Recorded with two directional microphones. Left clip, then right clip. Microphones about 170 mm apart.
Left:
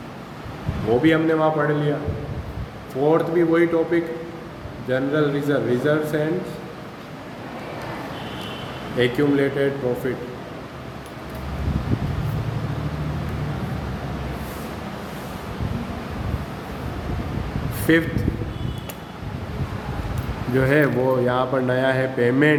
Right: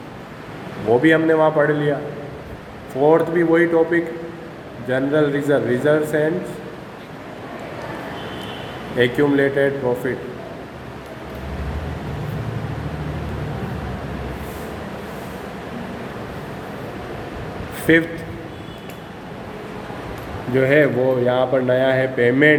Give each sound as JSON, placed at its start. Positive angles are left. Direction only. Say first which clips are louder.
{"t": 1.0, "sound": "a man's voice", "louder": "right 3 dB", "side_deg": -20}
{"t": 3.1, "sound": "a man's voice", "louder": "right 3 dB", "side_deg": -20}
{"t": 9.0, "sound": "a man's voice", "louder": "right 3 dB", "side_deg": -20}
{"t": 17.9, "sound": "a man's voice", "louder": "right 3 dB", "side_deg": -5}
{"t": 20.6, "sound": "a man's voice", "louder": "right 4 dB", "side_deg": 10}